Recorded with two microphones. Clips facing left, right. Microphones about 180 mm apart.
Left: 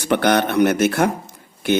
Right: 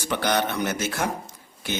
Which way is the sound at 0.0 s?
60° left (ahead or behind).